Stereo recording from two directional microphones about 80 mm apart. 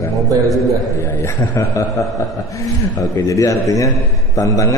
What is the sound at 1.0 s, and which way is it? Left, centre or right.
A man's voice, left.